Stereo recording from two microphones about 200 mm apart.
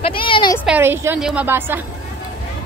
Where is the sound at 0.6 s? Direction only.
10° right (ahead or behind).